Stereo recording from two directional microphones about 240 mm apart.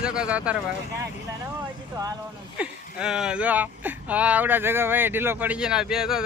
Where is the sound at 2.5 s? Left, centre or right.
Centre.